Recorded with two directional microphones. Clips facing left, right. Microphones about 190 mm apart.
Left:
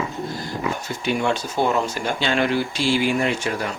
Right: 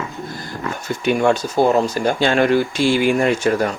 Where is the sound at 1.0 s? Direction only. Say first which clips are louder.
Right 6 dB; 50° right (ahead or behind).